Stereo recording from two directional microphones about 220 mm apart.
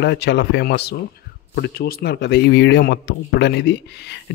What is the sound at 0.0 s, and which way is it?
Speech, 50° left (ahead or behind).